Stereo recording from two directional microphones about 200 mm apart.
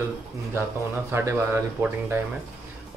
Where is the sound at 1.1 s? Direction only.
10° right (ahead or behind).